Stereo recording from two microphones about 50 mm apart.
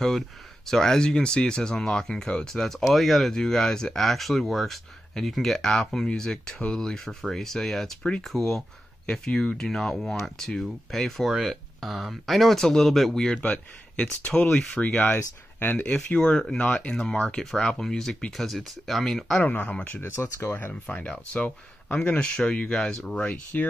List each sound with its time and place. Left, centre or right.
0.7 s speech: centre
13.4 s a man's voice: left
14.2 s speech: left
14.5 s speech: centre
16.2 s speech: centre
19.4 s speech: left
20.0 s speech: left
20.8 s speech: left
23.5 s speech: left